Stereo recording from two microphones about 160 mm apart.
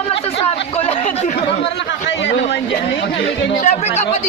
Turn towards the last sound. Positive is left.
turn(degrees=40)  # may be behind; listen again after turning